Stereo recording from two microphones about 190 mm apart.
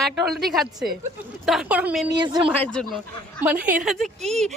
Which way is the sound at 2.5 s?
5° left (ahead or behind).